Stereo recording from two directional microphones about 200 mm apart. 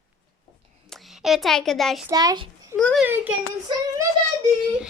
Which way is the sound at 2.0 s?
20° right (ahead or behind).